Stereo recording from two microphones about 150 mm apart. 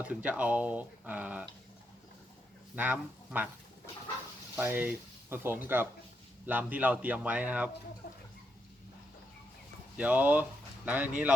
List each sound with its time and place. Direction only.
0.0 s speech: 10° right (ahead or behind)
2.7 s speech: 10° right (ahead or behind)
4.5 s speech: 15° right (ahead or behind)
8.0 s a sound: 90° left
10.0 s speech: 10° right (ahead or behind)